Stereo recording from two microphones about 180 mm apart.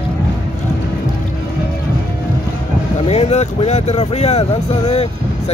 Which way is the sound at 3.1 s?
35° left (ahead or behind).